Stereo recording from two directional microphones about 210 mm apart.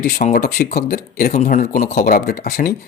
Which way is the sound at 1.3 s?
35° left (ahead or behind).